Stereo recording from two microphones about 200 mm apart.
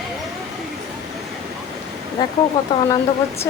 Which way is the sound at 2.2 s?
20° left (ahead or behind).